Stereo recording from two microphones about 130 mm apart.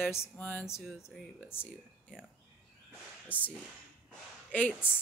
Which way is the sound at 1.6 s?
5° right (ahead or behind).